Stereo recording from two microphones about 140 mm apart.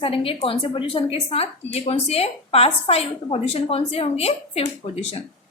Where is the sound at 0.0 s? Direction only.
40° left (ahead or behind).